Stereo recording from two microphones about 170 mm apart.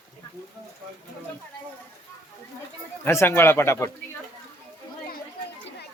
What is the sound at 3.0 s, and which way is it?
Speech, 15° left (ahead or behind).